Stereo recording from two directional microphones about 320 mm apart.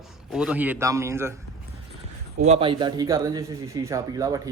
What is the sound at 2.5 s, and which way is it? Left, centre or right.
Speech, centre.